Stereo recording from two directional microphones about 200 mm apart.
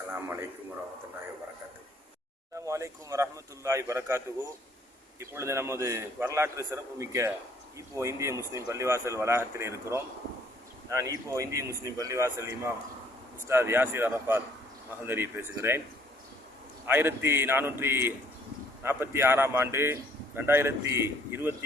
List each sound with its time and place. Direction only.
0.1 s a man's voice: 10° right (ahead or behind)
2.6 s a man's voice: 15° right (ahead or behind)
5.2 s a man's voice: 15° right (ahead or behind)
16.8 s a man's voice: 10° right (ahead or behind)